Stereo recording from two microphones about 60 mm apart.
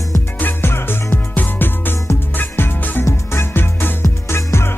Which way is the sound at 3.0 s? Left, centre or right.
Left.